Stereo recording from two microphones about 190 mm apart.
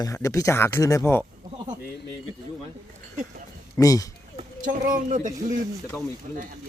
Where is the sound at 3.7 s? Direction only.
20° left (ahead or behind).